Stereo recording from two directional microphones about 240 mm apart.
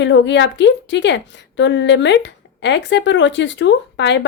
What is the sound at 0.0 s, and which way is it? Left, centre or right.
A woman's voice, left.